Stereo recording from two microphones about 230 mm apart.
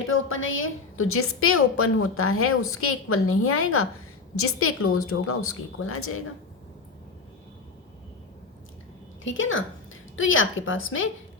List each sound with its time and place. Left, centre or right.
0.1 s a woman's voice: left
9.2 s a woman's voice: left